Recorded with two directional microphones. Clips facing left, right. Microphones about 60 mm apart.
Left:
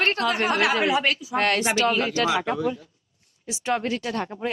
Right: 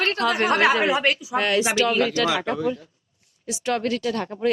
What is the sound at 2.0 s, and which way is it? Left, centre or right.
Speech, left.